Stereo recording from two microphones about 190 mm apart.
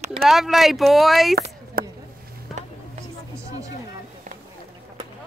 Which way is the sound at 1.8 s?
50° right (ahead or behind).